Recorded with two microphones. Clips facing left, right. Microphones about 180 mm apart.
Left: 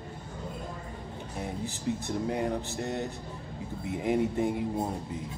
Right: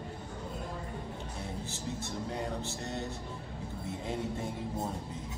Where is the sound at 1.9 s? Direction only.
70° left (ahead or behind).